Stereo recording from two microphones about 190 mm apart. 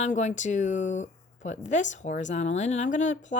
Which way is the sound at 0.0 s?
40° left (ahead or behind).